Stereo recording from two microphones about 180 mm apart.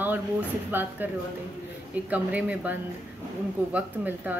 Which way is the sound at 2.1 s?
5° right (ahead or behind).